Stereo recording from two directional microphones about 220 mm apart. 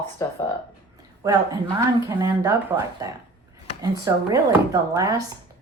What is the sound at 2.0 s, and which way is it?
Speech, 15° right (ahead or behind).